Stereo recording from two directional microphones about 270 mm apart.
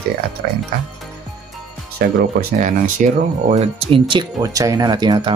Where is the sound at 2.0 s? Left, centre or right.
Right; by 5.4 s centre.